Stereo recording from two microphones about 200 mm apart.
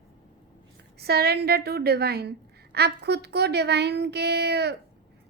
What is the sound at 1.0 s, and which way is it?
A woman's voice, 55° right (ahead or behind).